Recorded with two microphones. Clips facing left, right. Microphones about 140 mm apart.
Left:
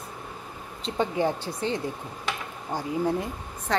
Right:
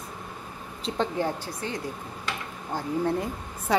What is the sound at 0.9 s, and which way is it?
Speech, 15° left (ahead or behind).